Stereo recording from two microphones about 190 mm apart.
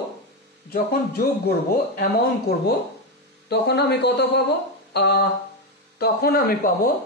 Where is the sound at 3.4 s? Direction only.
60° left (ahead or behind).